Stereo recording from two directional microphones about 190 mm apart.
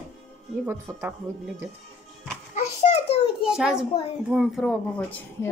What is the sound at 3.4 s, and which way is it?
Speech, 5° right (ahead or behind).